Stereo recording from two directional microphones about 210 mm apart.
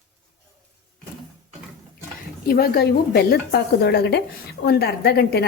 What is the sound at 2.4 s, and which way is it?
A woman's voice, 45° left (ahead or behind).